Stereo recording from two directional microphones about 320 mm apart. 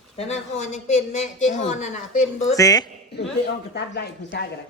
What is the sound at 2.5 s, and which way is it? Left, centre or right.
Speech, centre.